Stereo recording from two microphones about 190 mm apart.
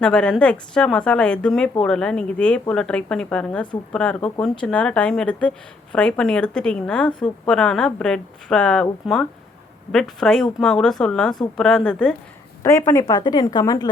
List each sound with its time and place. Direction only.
0.0 s a woman's voice: 5° left (ahead or behind); by 13.9 s 20° left (ahead or behind)